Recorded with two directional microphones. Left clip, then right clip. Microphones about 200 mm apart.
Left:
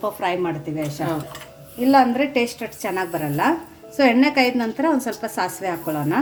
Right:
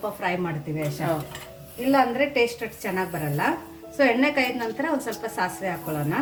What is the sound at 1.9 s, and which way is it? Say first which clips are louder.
A woman's voice: left 5 dB; 45° left (ahead or behind).